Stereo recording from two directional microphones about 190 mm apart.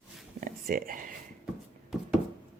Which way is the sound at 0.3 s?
45° right (ahead or behind).